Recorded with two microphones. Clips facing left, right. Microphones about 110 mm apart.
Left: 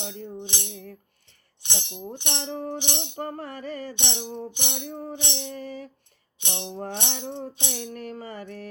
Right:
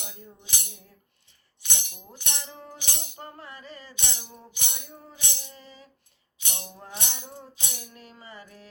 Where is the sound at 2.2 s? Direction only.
30° left (ahead or behind).